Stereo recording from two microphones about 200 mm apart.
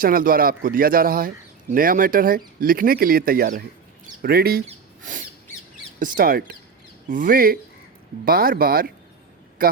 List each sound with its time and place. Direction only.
0.0 s speech: 45° right (ahead or behind)